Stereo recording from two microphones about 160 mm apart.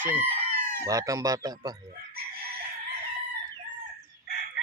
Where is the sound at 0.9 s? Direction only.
20° right (ahead or behind).